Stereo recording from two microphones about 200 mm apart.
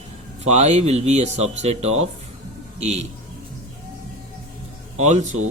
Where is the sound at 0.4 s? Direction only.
35° right (ahead or behind).